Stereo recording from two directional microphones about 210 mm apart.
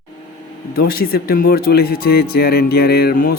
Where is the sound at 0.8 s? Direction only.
45° left (ahead or behind).